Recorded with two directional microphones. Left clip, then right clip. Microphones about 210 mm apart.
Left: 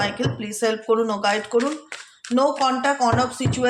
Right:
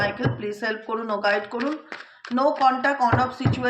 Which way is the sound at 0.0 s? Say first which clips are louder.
Even; 45° left (ahead or behind).